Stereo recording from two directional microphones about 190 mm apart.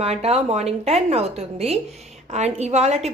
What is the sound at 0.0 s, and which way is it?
A woman's voice, 35° right (ahead or behind).